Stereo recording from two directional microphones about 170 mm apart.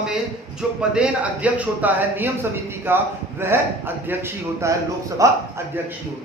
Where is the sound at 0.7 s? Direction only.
5° right (ahead or behind).